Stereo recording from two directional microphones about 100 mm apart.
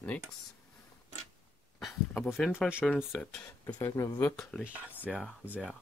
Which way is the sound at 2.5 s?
10° right (ahead or behind).